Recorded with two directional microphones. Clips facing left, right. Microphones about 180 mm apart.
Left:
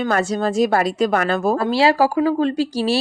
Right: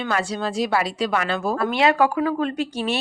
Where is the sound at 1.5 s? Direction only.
30° left (ahead or behind).